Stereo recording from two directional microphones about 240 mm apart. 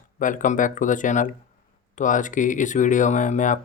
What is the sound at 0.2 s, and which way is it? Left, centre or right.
Speech, left.